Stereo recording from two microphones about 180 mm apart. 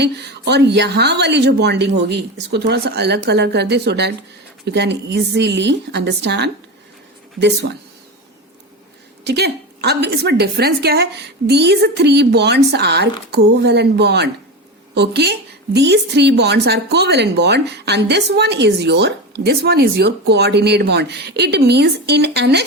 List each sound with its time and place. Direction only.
0.0 s a woman's voice: 70° right (ahead or behind)
9.2 s a woman's voice: 65° right (ahead or behind)